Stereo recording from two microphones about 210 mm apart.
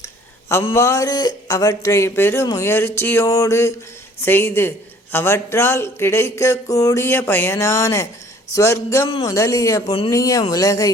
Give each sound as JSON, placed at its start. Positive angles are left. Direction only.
{"t": 0.0, "sound": "a man's voice", "side_deg": 15}